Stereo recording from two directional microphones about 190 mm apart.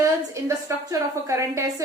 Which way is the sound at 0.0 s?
15° right (ahead or behind).